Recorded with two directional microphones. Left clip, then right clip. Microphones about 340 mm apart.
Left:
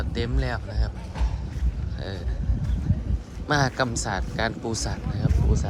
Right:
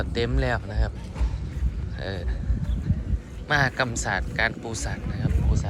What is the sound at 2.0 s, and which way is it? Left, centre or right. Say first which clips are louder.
Speech: right 3 dB; centre.